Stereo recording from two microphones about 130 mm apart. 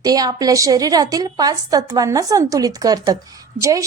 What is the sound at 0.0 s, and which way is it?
A woman's voice, 30° right (ahead or behind).